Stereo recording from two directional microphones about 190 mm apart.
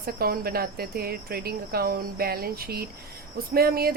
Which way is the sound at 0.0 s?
50° right (ahead or behind).